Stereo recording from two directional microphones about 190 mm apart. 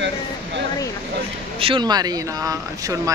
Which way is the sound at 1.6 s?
25° right (ahead or behind).